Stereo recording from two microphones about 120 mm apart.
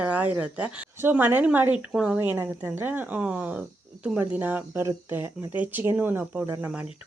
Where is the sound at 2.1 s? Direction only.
15° right (ahead or behind).